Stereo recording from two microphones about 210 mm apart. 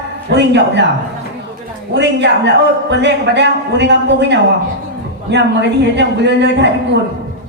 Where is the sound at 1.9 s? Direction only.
55° right (ahead or behind).